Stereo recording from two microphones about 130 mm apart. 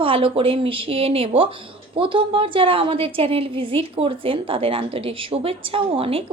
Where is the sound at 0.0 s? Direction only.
45° right (ahead or behind).